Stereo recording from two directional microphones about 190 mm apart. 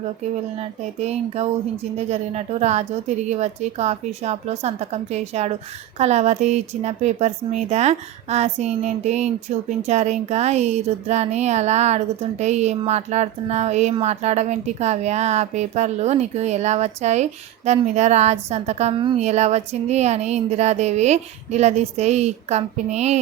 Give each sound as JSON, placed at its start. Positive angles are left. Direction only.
{"t": 0.9, "sound": "speech", "side_deg": -35}